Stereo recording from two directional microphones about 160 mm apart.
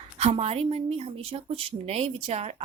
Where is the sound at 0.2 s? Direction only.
40° right (ahead or behind).